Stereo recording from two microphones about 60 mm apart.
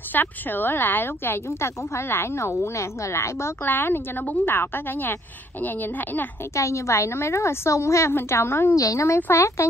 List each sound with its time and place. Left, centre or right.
0.1 s a woman's voice: left
3.6 s speech: left
6.5 s a woman's voice: left
8.7 s a woman's voice: left
9.0 s a woman's voice: left